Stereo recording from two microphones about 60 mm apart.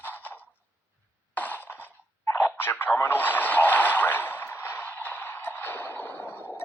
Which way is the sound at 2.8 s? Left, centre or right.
Left.